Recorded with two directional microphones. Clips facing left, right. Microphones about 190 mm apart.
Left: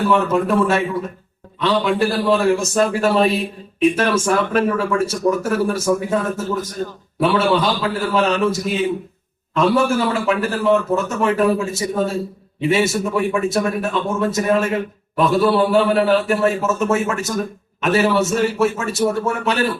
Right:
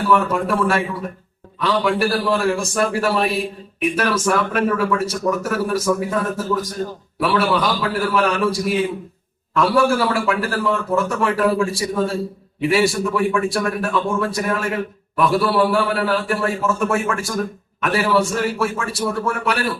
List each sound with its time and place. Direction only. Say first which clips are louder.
0.1 s speech: right 1 dB; 20° left (ahead or behind)